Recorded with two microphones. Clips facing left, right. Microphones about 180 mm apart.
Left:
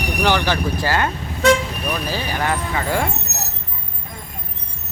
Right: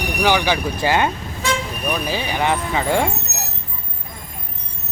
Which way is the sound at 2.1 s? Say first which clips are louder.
Right 3 dB; 20° right (ahead or behind).